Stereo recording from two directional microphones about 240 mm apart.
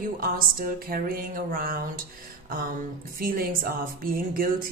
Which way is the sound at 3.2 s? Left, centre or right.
Right.